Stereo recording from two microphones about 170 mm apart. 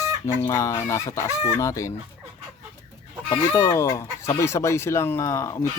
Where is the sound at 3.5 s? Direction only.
15° left (ahead or behind).